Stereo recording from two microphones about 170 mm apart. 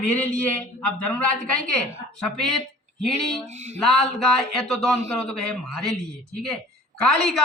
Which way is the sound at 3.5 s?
40° right (ahead or behind).